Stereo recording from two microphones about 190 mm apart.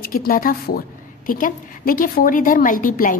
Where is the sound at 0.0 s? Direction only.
50° left (ahead or behind).